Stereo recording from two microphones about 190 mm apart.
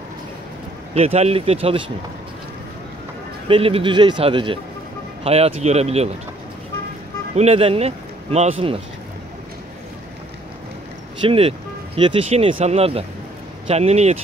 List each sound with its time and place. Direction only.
0.9 s a man's voice: 35° right (ahead or behind)
3.4 s a man's voice: 30° right (ahead or behind)
7.3 s speech: 30° right (ahead or behind)
11.2 s a man's voice: 30° right (ahead or behind)